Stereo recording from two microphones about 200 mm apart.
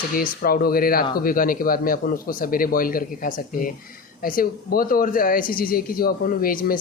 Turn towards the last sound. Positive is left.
turn(degrees=45)  # may be behind; listen again after turning